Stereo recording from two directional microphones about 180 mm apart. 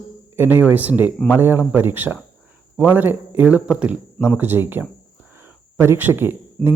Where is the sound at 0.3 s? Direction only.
10° right (ahead or behind).